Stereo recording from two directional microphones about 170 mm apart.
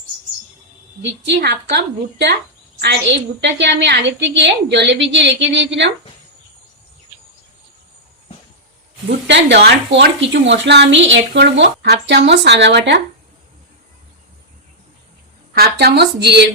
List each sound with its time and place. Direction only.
1.3 s a woman's voice: 70° right (ahead or behind)
1.7 s a woman's voice: 80° right
9.0 s speech: 90° right
15.5 s a woman's voice: 70° right (ahead or behind)